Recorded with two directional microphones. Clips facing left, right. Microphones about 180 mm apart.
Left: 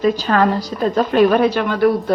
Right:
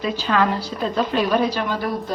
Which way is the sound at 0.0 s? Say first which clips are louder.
Left 5 dB; 45° left (ahead or behind).